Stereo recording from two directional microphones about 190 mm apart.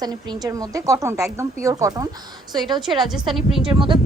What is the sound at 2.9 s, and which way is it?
Speech, centre (ahead or behind).